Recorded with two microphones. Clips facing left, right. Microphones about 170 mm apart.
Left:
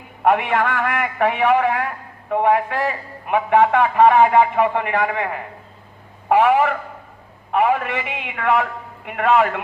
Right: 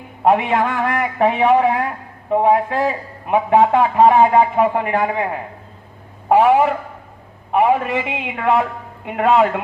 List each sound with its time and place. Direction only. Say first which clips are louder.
0.2 s a man's voice: right 2 dB; 25° right (ahead or behind)